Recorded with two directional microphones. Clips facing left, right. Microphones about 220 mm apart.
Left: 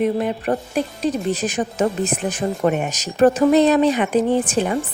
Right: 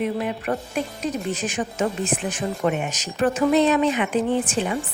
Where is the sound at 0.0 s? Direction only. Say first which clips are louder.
Left 5 dB; 35° left (ahead or behind).